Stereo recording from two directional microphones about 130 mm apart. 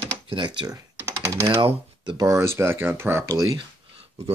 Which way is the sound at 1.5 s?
40° right (ahead or behind).